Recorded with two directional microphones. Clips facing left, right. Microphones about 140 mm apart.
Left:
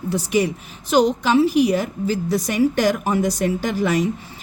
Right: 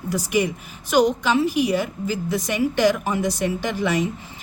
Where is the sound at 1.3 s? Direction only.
40° left (ahead or behind).